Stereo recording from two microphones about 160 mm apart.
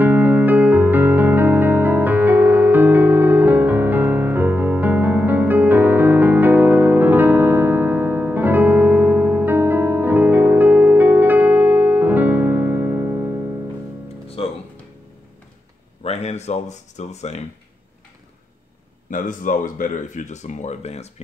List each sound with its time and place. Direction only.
0.0 s music: 10° right (ahead or behind)
14.4 s music: 35° left (ahead or behind)
16.0 s a sound: 40° left (ahead or behind)
19.0 s speech: 55° left (ahead or behind)